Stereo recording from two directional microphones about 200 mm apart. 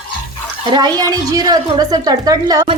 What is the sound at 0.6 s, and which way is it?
A woman's voice, 20° right (ahead or behind).